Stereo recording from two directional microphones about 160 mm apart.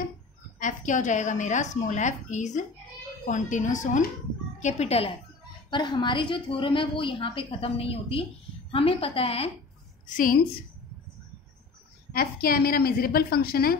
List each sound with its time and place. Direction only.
0.6 s a woman's voice: 50° left (ahead or behind)
5.7 s a woman's voice: 30° left (ahead or behind)
10.0 s a woman's voice: 55° left (ahead or behind)
12.1 s a woman's voice: 70° left (ahead or behind)